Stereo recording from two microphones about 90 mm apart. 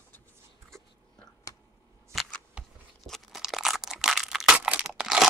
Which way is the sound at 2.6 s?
10° right (ahead or behind).